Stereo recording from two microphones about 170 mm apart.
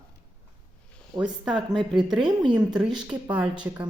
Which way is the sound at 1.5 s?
25° right (ahead or behind).